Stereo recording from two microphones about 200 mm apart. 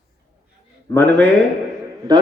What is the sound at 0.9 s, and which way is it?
Speech, 10° left (ahead or behind).